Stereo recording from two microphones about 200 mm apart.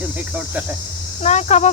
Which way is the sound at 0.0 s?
10° right (ahead or behind).